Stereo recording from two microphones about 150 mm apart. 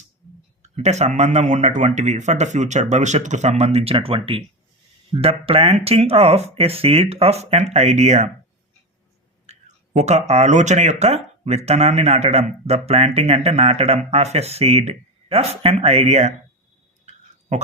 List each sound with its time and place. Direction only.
0.6 s speech: 50° right (ahead or behind)
9.5 s speech: 50° right (ahead or behind)